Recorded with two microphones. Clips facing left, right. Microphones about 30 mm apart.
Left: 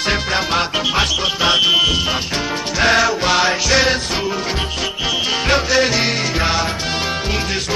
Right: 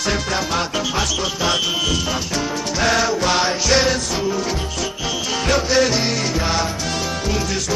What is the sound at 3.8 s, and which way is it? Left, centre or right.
Music, left.